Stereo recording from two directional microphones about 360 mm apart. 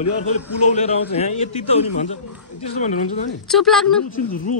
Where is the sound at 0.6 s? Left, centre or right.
Centre.